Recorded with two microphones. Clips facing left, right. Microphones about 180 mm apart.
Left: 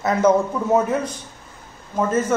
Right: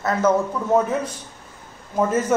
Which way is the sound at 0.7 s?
Centre (ahead or behind).